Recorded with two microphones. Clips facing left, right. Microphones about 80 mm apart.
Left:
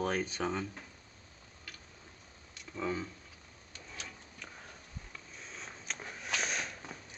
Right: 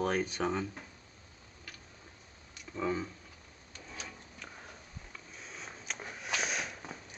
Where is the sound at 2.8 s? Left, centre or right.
Centre.